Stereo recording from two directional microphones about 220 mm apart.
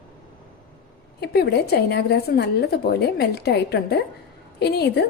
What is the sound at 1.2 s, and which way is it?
A woman's voice, 45° left (ahead or behind).